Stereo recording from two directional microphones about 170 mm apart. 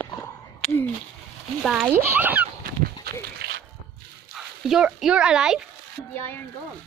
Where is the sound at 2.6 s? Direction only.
60° right (ahead or behind).